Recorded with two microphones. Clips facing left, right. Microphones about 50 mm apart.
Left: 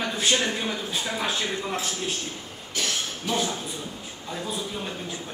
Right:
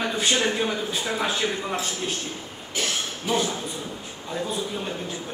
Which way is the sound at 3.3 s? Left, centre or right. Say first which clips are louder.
Right 3 dB; centre.